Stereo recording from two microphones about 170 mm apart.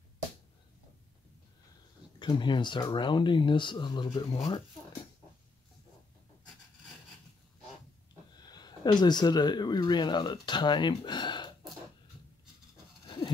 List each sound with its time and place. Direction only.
2.1 s speech: 25° left (ahead or behind)
8.4 s speech: 25° left (ahead or behind)
13.0 s a sound: 30° left (ahead or behind)